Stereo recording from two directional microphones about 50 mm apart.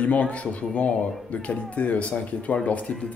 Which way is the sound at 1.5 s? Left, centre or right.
Left.